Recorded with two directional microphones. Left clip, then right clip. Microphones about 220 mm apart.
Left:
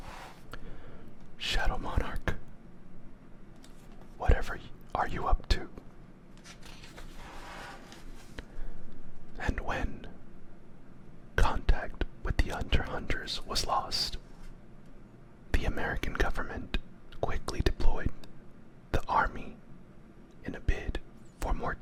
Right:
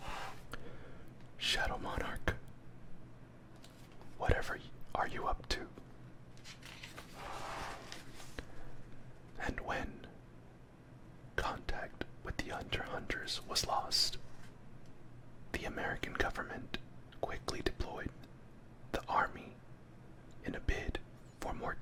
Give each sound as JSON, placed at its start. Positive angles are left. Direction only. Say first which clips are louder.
{"t": 1.4, "sound": "speech", "louder": "left 2 dB", "side_deg": 10}
{"t": 4.2, "sound": "whispering", "louder": "left 3 dB", "side_deg": 10}
{"t": 9.3, "sound": "whispering", "louder": "left 4 dB", "side_deg": 10}
{"t": 11.3, "sound": "whispering", "louder": "left 7 dB", "side_deg": 15}
{"t": 15.5, "sound": "whispering", "louder": "left 5 dB", "side_deg": 15}